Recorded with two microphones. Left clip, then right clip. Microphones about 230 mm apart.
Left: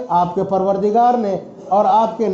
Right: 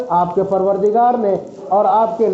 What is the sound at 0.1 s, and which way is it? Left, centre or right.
A man's voice, left.